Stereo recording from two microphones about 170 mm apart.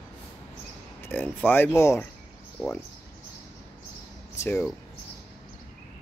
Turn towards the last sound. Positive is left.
turn(degrees=10)  # may be behind; listen again after turning